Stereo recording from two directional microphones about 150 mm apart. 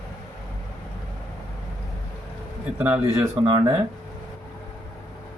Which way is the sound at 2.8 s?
10° right (ahead or behind).